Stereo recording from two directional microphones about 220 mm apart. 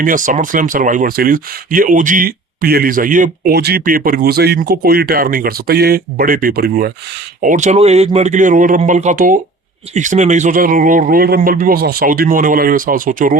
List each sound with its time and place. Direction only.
0.0 s speech: 35° right (ahead or behind)